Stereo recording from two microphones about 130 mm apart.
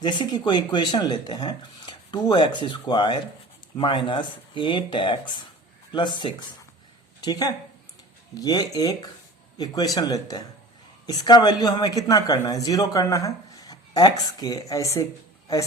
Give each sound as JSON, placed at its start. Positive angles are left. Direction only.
{"t": 0.0, "sound": "a man's voice", "side_deg": 35}